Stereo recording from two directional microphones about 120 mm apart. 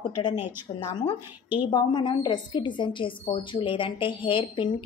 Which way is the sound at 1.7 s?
35° left (ahead or behind).